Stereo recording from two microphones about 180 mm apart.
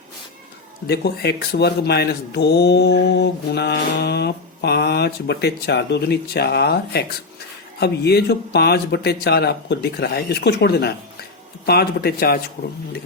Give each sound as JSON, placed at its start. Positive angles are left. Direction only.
{"t": 0.9, "sound": "speech", "side_deg": 65}